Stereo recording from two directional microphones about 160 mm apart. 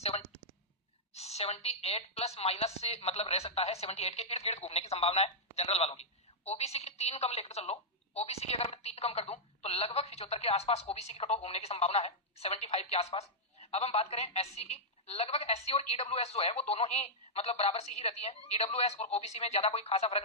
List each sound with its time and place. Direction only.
1.1 s a woman's voice: 40° left (ahead or behind)